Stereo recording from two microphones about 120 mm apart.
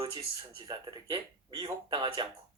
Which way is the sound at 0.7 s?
35° right (ahead or behind).